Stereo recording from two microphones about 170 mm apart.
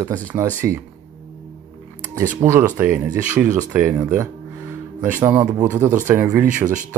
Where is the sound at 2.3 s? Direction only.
15° right (ahead or behind).